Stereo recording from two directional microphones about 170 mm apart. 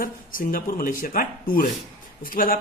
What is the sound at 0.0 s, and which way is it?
Speech, 55° left (ahead or behind).